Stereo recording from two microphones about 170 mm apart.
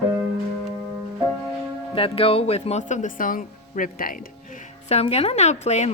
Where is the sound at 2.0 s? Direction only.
35° left (ahead or behind); by 4.1 s 55° left (ahead or behind).